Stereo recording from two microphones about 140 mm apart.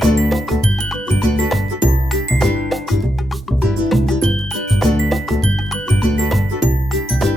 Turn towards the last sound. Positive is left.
turn(degrees=0)  # may be behind; listen again after turning